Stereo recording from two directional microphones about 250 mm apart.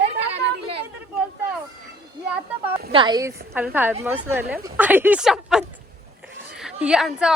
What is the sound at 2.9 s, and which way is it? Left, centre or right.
A woman's voice, centre.